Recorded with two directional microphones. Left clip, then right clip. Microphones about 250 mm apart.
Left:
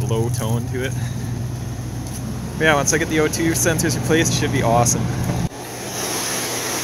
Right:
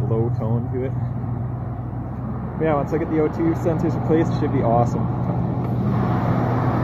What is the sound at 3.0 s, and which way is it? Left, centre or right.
Speech, left.